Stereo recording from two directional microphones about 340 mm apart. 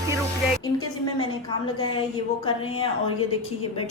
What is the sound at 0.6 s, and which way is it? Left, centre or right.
A woman's voice, centre.